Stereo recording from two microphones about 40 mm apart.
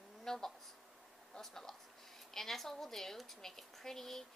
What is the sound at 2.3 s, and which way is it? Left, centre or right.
A woman's voice, centre.